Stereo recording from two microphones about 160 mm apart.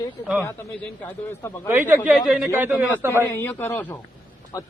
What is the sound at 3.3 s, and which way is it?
Speech, 15° left (ahead or behind).